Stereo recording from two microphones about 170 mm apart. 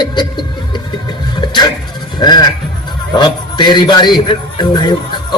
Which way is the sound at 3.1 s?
25° left (ahead or behind).